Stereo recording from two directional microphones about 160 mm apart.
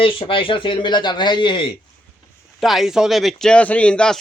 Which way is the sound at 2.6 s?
Centre (ahead or behind).